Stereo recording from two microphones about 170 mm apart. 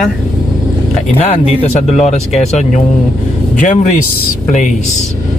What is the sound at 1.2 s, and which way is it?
Speech, 40° left (ahead or behind).